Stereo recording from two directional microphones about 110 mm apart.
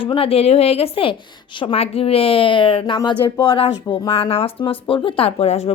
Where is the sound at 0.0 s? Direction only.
55° left (ahead or behind).